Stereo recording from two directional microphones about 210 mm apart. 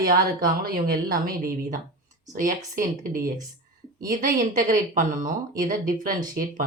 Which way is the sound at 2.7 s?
40° right (ahead or behind).